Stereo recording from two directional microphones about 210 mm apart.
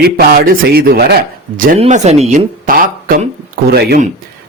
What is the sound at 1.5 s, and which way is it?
Speech, 40° right (ahead or behind).